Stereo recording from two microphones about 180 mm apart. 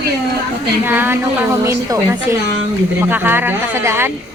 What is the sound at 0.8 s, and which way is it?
A woman's voice, 10° right (ahead or behind).